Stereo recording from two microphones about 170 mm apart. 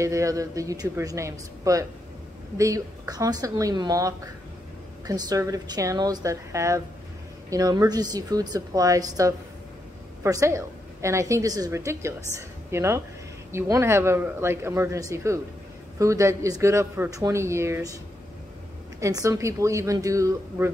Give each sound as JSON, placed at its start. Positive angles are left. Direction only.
{"t": 0.0, "sound": "a woman's voice", "side_deg": -20}
{"t": 18.9, "sound": "a woman's voice", "side_deg": -20}